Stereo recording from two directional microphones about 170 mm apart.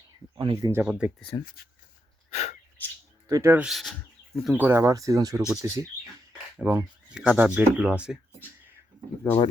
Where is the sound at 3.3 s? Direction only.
15° right (ahead or behind).